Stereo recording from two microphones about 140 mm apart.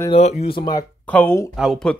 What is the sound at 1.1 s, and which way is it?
Speech, 15° left (ahead or behind).